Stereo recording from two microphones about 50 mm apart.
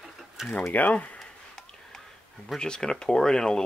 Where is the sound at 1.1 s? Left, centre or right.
Centre.